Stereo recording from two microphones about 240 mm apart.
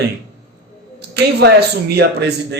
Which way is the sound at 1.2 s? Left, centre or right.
Right.